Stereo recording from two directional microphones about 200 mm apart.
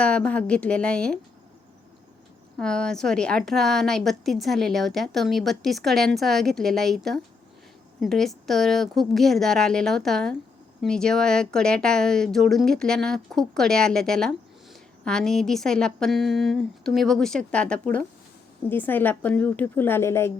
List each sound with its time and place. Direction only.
0.0 s speech: 5° left (ahead or behind)
2.6 s a woman's voice: 5° left (ahead or behind)